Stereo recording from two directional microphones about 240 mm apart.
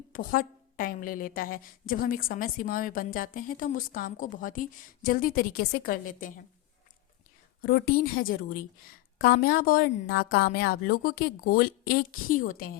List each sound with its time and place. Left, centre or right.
0.1 s a woman's voice: left
7.6 s a woman's voice: left